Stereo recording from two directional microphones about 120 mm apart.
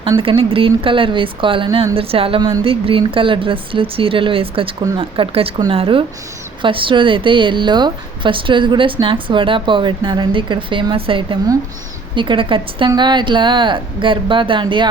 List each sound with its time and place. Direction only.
0.2 s a woman's voice: 50° right (ahead or behind)